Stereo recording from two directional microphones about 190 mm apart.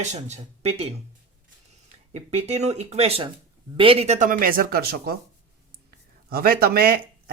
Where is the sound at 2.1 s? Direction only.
35° right (ahead or behind); by 5.2 s 55° right (ahead or behind).